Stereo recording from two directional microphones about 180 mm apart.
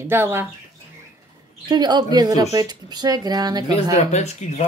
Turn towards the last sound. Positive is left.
turn(degrees=40)  # may be behind; listen again after turning